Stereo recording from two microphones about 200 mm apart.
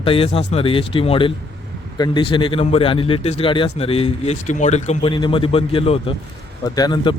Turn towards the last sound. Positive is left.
turn(degrees=25)  # may be behind; listen again after turning